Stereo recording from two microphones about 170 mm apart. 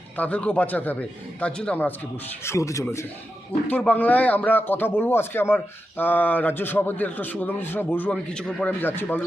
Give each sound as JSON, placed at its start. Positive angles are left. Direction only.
{"t": 0.2, "sound": "a man's voice", "side_deg": 10}